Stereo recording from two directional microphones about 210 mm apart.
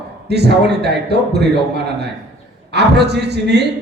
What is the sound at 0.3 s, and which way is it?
A man's voice, 50° right (ahead or behind).